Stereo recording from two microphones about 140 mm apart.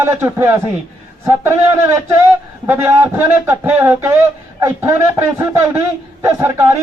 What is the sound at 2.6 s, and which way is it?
Speech, 15° right (ahead or behind).